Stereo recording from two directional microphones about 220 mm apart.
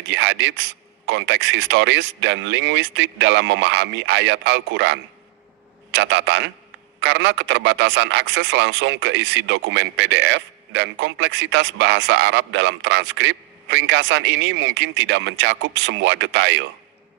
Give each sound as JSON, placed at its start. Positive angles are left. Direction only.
{"t": 0.0, "sound": "a man's voice", "side_deg": -55}